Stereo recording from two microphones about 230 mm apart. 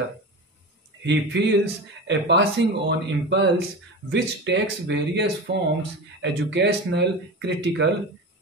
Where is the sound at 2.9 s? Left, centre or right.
Right.